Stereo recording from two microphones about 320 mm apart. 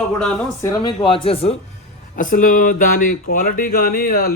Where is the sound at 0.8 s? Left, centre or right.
Centre.